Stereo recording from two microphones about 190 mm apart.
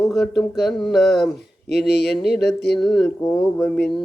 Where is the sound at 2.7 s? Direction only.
Centre (ahead or behind).